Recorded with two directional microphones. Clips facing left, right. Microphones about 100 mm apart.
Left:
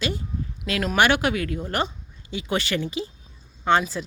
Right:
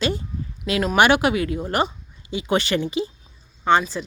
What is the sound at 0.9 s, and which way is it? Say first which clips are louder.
Speech: right 3 dB; 15° right (ahead or behind).